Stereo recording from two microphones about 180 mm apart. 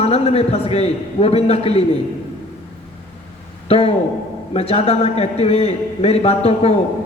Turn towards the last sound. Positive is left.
turn(degrees=35)  # may be behind; listen again after turning